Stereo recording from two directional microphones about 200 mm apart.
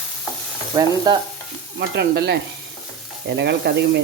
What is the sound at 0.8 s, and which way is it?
Stir, 20° right (ahead or behind).